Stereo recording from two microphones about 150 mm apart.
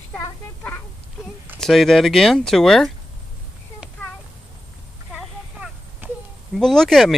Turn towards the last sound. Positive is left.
turn(degrees=0)  # may be behind; listen again after turning